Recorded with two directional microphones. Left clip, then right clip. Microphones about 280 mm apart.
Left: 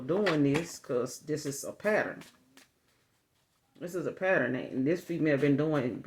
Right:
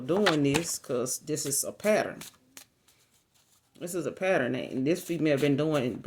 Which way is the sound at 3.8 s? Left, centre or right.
Right.